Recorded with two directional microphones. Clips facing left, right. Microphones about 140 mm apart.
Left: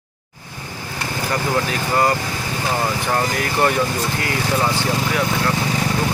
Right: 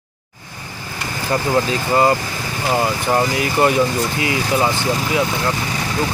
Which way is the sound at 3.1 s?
15° right (ahead or behind).